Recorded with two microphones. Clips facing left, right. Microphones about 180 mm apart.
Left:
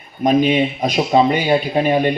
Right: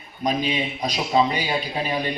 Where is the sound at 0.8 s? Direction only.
45° left (ahead or behind).